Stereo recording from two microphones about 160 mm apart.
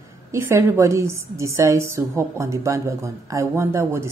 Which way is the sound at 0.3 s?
15° right (ahead or behind).